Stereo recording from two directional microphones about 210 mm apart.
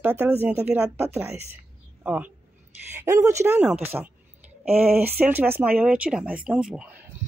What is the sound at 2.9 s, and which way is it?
Speech, 15° right (ahead or behind).